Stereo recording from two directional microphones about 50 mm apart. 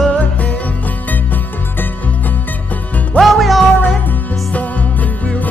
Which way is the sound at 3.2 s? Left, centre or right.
Centre.